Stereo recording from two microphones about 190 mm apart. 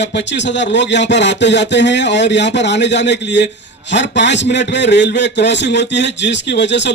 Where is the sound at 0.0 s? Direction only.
70° left (ahead or behind).